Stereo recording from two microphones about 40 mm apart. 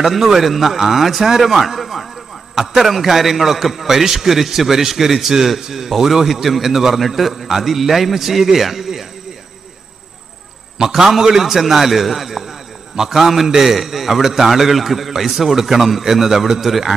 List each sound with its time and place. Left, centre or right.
0.0 s a man's voice: centre
10.8 s a man's voice: centre